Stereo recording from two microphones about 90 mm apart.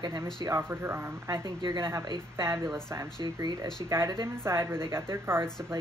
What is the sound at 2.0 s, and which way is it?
Speech, 50° right (ahead or behind).